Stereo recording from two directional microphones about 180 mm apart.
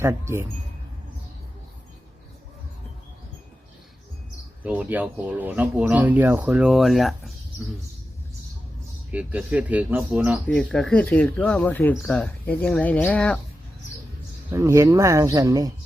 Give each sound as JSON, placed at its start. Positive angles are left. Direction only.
{"t": 0.0, "sound": "speech", "side_deg": -15}
{"t": 4.6, "sound": "speech", "side_deg": -10}
{"t": 9.1, "sound": "speech", "side_deg": -10}
{"t": 14.5, "sound": "speech", "side_deg": -15}